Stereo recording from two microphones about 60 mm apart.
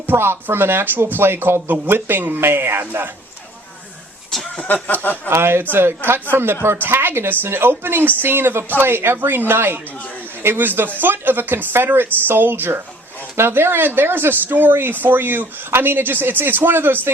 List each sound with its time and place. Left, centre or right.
0.1 s speech: right
4.5 s a sound: left
5.3 s speech: right